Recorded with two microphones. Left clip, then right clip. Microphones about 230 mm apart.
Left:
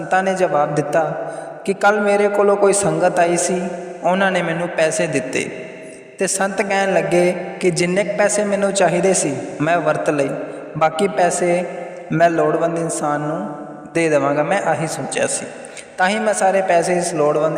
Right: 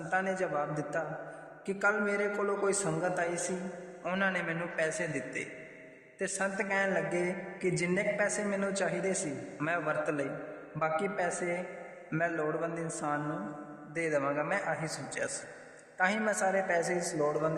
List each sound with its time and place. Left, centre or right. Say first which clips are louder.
0.1 s a man's voice: left 15 dB; left